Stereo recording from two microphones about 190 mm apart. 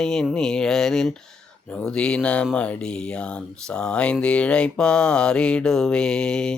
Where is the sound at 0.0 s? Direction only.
5° left (ahead or behind).